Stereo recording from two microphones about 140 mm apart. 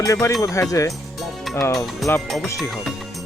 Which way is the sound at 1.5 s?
Centre (ahead or behind).